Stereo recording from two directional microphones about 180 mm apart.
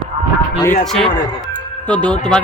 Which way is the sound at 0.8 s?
5° left (ahead or behind).